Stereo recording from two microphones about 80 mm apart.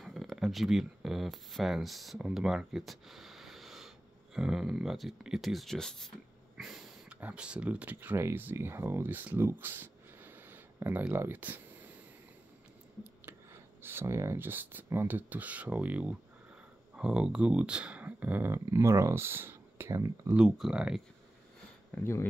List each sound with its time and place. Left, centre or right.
0.0 s speech: centre
6.5 s snort: centre
7.1 s speech: centre
9.5 s a sound: right
13.2 s speech: right
18.5 s speech: right
20.4 s speech: centre
20.7 s speech: centre
21.9 s speech: left